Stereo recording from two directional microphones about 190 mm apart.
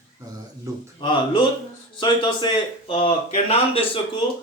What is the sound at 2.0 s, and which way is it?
A man's voice, 25° left (ahead or behind).